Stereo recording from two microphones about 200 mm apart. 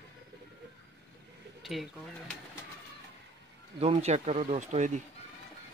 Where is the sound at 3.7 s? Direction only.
30° right (ahead or behind).